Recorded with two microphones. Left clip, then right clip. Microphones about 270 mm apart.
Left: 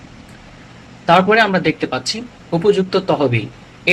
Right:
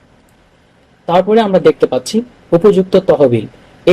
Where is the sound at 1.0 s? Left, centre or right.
Right.